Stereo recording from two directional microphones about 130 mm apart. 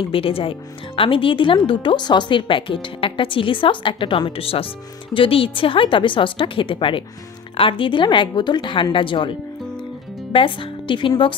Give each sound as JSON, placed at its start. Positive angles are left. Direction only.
{"t": 0.1, "sound": "speech", "side_deg": 45}